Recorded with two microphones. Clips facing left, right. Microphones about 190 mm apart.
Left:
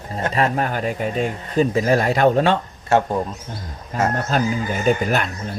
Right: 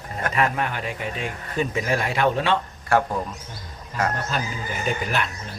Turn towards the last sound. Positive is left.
turn(degrees=45)  # may be behind; listen again after turning